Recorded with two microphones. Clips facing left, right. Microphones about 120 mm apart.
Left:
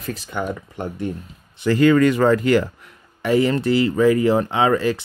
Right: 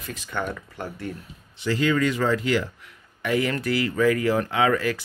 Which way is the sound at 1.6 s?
50° left (ahead or behind).